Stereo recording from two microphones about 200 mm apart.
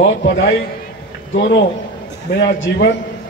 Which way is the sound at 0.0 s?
65° left (ahead or behind).